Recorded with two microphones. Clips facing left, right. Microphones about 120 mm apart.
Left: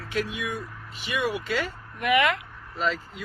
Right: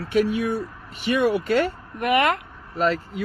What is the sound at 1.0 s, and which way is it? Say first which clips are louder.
Speech: right 8 dB; 55° right (ahead or behind).